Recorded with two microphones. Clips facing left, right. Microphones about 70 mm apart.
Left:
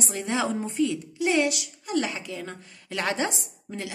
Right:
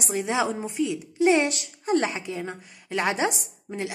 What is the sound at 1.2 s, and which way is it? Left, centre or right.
A woman's voice, right.